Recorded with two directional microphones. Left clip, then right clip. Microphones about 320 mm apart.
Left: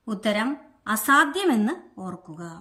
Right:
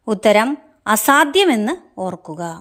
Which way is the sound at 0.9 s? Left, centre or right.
Centre.